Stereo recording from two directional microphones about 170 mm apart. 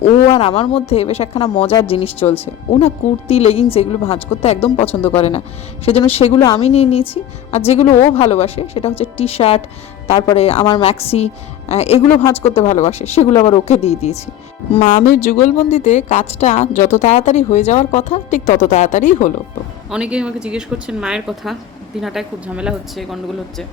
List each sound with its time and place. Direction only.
0.3 s a woman's voice: 30° left (ahead or behind)
12.2 s speech: 15° left (ahead or behind)
12.5 s a woman's voice: 40° left (ahead or behind)
15.0 s speech: 45° left (ahead or behind)
19.9 s speech: 5° right (ahead or behind)